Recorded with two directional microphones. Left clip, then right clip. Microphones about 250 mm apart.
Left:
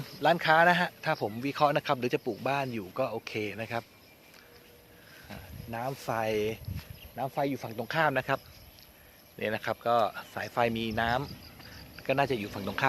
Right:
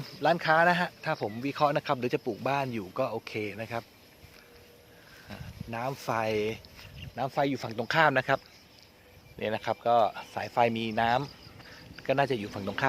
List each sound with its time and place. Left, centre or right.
0.0 s speech: centre
5.3 s speech: centre
7.2 s speech: centre
9.4 s speech: centre